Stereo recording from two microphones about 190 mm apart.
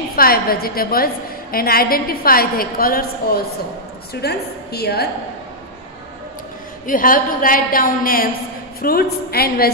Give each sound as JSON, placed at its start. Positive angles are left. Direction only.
{"t": 0.1, "sound": "a woman's voice", "side_deg": 50}
{"t": 6.9, "sound": "a woman's voice", "side_deg": 45}